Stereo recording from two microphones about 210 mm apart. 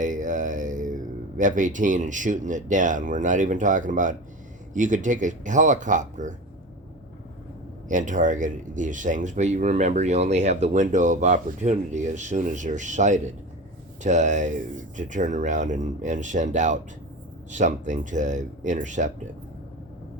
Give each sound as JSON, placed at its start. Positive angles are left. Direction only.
{"t": 0.0, "sound": "speech", "side_deg": -35}
{"t": 7.9, "sound": "speech", "side_deg": -35}